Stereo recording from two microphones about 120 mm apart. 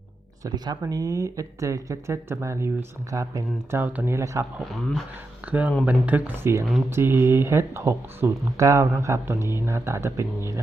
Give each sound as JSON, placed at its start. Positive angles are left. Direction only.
{"t": 0.4, "sound": "speech", "side_deg": -35}
{"t": 5.5, "sound": "speech", "side_deg": -15}